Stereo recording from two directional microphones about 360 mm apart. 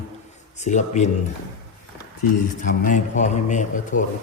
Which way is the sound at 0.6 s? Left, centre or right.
Centre.